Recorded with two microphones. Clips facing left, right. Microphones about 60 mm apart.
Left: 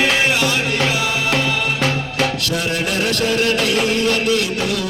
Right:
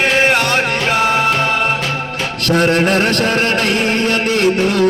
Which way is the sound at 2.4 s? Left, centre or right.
Right.